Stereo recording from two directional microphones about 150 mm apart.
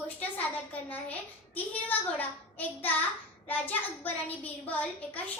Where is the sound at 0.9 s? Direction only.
10° left (ahead or behind).